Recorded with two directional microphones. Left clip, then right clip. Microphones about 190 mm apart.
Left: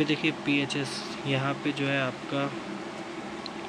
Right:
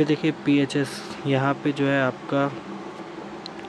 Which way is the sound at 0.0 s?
25° right (ahead or behind).